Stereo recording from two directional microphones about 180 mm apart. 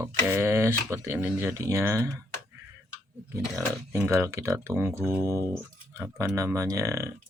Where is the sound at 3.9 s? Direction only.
15° right (ahead or behind).